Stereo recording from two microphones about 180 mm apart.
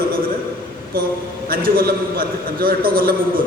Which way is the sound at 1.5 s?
55° right (ahead or behind).